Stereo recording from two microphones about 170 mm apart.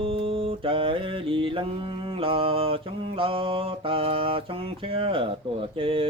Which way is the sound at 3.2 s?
30° right (ahead or behind).